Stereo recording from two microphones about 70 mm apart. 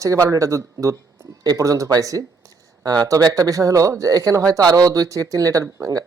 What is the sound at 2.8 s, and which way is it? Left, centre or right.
Speech, right.